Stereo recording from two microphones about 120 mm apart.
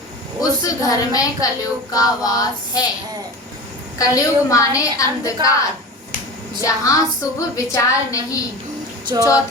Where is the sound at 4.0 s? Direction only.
30° left (ahead or behind).